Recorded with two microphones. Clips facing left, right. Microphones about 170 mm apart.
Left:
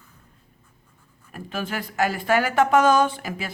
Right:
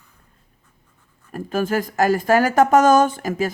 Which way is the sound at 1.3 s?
45° right (ahead or behind).